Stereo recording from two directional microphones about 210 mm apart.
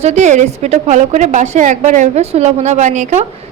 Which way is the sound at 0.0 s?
35° right (ahead or behind).